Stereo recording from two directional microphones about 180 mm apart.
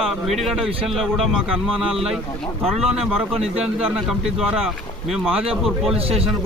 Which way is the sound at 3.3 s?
35° right (ahead or behind).